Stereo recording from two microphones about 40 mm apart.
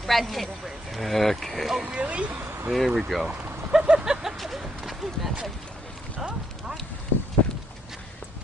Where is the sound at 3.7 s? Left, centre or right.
Centre.